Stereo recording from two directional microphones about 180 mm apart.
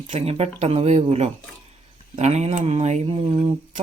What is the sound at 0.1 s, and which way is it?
Speech, 35° right (ahead or behind).